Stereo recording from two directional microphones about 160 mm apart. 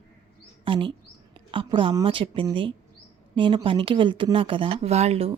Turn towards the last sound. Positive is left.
turn(degrees=-40)  # may be behind; listen again after turning